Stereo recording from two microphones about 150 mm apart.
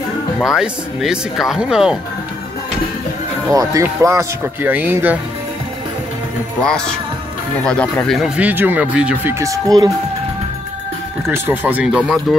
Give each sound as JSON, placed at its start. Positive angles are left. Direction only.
{"t": 0.4, "sound": "speech", "side_deg": -5}
{"t": 3.4, "sound": "speech", "side_deg": -20}
{"t": 6.6, "sound": "speech", "side_deg": 5}
{"t": 8.4, "sound": "speech", "side_deg": -10}
{"t": 11.2, "sound": "speech", "side_deg": -15}